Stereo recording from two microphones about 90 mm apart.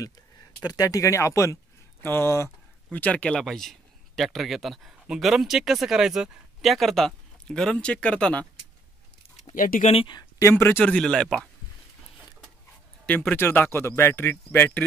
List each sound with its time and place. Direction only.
0.6 s speech: 45° left (ahead or behind)
2.9 s a man's voice: 15° left (ahead or behind)
10.4 s speech: 25° left (ahead or behind)
10.9 s speech: 5° left (ahead or behind)
13.0 s speech: 20° left (ahead or behind)